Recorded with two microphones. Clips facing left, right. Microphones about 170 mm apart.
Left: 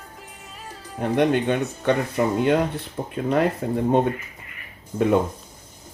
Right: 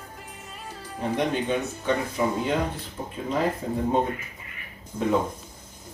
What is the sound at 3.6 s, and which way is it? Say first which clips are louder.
Speech: left 4 dB; 65° left (ahead or behind).